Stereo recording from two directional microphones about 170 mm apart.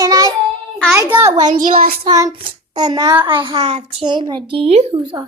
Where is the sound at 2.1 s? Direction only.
20° right (ahead or behind).